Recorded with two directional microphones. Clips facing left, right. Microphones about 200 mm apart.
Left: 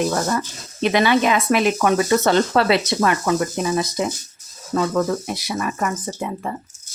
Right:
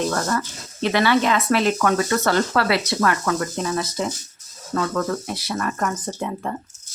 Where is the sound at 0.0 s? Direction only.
10° left (ahead or behind).